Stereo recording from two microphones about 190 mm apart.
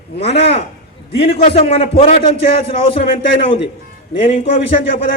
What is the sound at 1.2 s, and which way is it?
Speech, 35° left (ahead or behind).